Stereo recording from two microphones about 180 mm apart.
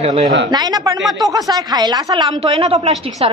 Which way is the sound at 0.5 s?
25° right (ahead or behind).